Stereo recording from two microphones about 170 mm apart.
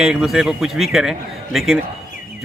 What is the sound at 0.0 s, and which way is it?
Speech, 5° right (ahead or behind).